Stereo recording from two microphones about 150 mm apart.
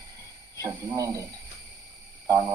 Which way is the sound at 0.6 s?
25° right (ahead or behind).